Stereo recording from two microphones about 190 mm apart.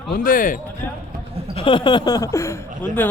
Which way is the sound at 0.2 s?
45° left (ahead or behind).